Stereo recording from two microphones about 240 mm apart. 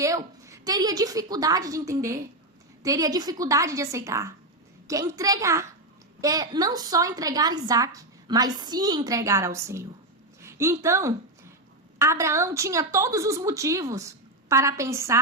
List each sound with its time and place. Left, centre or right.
0.4 s a woman's voice: centre
10.4 s a sound: centre
11.9 s a woman's voice: centre